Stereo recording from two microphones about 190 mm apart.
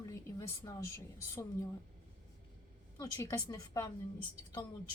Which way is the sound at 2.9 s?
15° left (ahead or behind).